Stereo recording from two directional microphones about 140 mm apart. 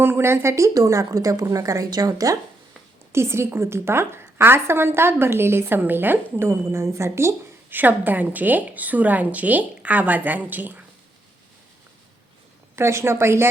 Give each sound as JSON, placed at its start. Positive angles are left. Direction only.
{"t": 0.0, "sound": "a woman's voice", "side_deg": -15}
{"t": 12.7, "sound": "a woman's voice", "side_deg": -20}